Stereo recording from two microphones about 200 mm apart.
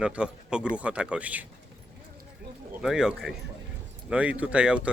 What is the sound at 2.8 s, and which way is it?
Speech, centre (ahead or behind).